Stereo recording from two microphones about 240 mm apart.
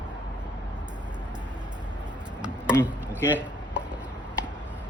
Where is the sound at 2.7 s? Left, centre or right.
Centre.